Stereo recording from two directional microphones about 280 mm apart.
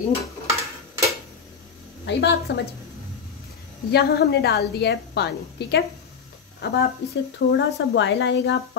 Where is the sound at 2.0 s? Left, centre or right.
Left.